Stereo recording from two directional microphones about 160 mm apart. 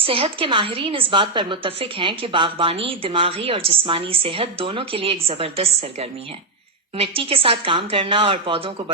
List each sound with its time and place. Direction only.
0.0 s a woman's voice: 35° right (ahead or behind)